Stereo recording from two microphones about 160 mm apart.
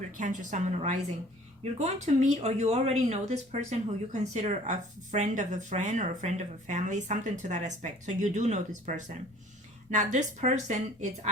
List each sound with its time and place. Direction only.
0.1 s speech: 55° right (ahead or behind)